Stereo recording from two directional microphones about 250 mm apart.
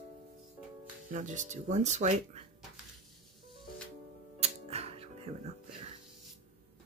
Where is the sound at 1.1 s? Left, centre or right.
Right.